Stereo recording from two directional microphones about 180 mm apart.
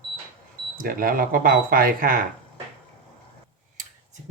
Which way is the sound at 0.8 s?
50° right (ahead or behind).